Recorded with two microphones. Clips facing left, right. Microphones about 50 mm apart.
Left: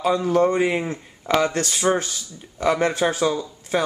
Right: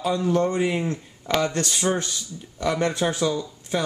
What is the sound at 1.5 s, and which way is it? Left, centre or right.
Speech, centre.